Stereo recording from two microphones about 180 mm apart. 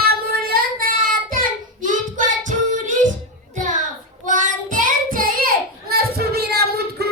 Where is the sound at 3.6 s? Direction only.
45° right (ahead or behind).